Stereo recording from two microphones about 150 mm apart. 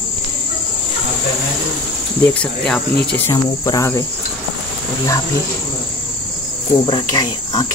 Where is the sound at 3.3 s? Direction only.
20° left (ahead or behind).